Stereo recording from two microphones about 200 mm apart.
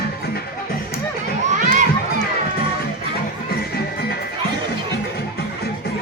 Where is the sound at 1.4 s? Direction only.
35° right (ahead or behind).